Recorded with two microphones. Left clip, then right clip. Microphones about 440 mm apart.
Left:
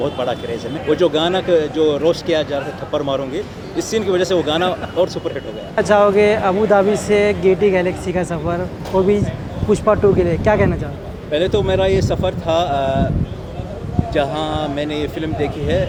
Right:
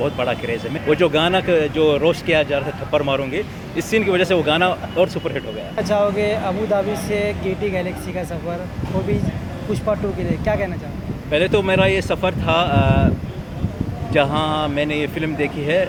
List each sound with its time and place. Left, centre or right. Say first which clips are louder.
0.0 s a sound: left 1 dB; right
0.9 s speech: left 1 dB; right
5.7 s speech: left 6 dB; left
9.7 s speech: left 8 dB; left
11.3 s speech: even; right
14.1 s speech: right 1 dB; right